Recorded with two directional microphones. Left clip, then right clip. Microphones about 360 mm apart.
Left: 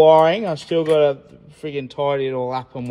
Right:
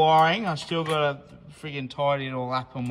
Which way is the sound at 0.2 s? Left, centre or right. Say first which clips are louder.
Left 5 dB; centre.